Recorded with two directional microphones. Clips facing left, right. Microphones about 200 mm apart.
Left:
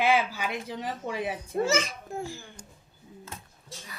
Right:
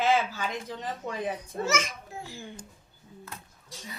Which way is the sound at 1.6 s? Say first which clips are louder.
Left 1 dB; 30° left (ahead or behind).